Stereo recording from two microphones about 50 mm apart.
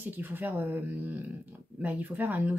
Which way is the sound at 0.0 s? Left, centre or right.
Right.